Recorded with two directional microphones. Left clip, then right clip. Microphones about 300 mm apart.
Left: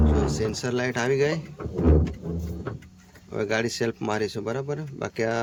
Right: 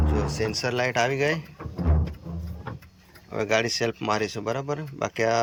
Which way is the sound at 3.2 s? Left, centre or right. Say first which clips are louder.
Right 2 dB; centre.